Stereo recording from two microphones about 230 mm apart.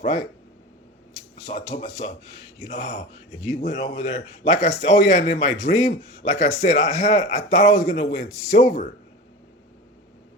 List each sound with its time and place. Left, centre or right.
0.0 s speech: left